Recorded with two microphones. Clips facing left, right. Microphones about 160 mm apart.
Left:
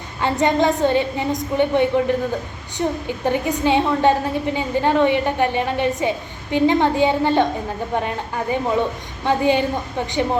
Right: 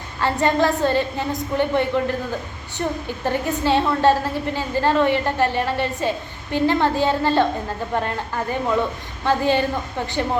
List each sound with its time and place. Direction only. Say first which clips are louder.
0.2 s a woman's voice: left 1 dB; 20° left (ahead or behind)
3.2 s a woman's voice: left 2 dB; 15° left (ahead or behind)